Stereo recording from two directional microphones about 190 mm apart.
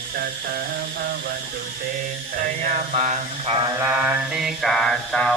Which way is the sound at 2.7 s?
45° right (ahead or behind).